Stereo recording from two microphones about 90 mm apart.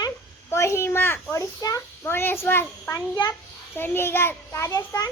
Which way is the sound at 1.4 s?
40° left (ahead or behind).